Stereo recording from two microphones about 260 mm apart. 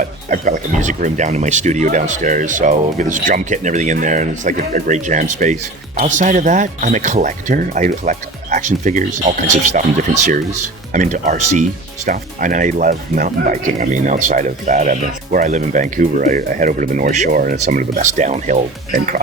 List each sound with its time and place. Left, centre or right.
0.0 s speech: right
10.9 s speech: right